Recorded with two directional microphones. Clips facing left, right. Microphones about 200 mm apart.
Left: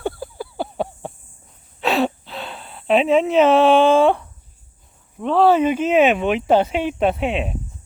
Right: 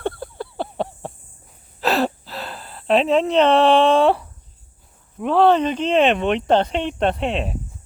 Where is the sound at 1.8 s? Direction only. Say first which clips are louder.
Left 1 dB; centre (ahead or behind).